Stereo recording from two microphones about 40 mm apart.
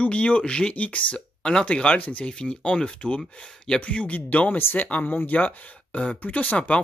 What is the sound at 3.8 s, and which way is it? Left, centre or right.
Speech, left.